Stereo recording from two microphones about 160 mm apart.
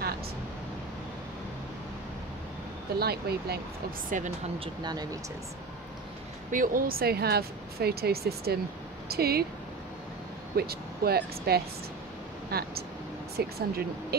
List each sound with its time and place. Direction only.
3.0 s speech: 80° right
4.1 s speech: 55° right (ahead or behind)
4.6 s speech: 25° right (ahead or behind)
6.5 s speech: 60° right (ahead or behind); by 9.5 s 75° right (ahead or behind)
10.5 s speech: 75° right (ahead or behind)